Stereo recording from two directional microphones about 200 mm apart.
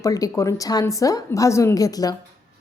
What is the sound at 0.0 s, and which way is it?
A woman's voice, 15° left (ahead or behind).